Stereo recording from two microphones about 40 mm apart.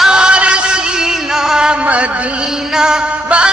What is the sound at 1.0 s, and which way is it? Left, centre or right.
Music, centre.